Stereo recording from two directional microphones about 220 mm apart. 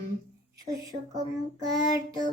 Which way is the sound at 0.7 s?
15° right (ahead or behind).